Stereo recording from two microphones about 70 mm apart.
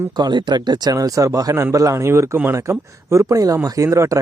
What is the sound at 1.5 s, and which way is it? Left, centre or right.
Speech, right.